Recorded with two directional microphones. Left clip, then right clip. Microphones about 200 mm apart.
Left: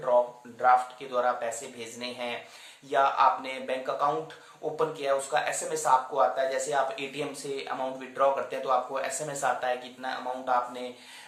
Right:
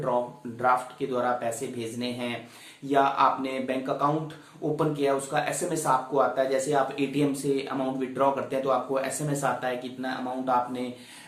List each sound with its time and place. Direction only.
0.6 s speech: 15° left (ahead or behind)